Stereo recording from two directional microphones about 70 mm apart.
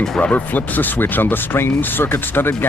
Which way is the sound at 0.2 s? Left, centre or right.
Left.